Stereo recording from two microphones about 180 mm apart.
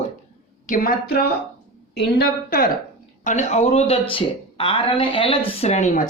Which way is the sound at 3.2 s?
40° left (ahead or behind).